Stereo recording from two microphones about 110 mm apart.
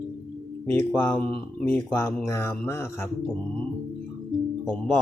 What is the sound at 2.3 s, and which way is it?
Speech, 25° left (ahead or behind).